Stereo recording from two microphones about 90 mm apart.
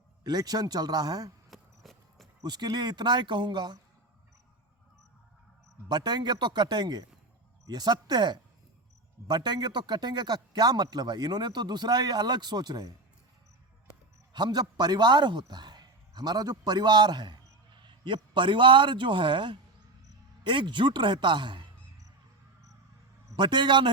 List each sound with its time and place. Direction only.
0.3 s a man's voice: 45° right (ahead or behind)
1.5 s a sound: centre (ahead or behind)
2.4 s speech: 50° right (ahead or behind)
5.9 s a man's voice: 50° right (ahead or behind)
14.3 s a man's voice: 55° right (ahead or behind)
23.3 s speech: 55° right (ahead or behind)